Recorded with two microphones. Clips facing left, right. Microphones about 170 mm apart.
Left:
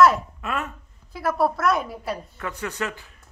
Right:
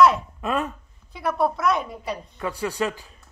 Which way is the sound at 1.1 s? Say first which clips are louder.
Left 1 dB; centre (ahead or behind).